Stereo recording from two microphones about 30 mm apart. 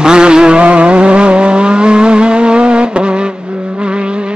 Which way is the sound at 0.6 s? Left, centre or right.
Right.